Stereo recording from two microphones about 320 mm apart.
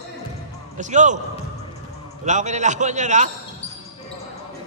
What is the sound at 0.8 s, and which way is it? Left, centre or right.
Speech, right.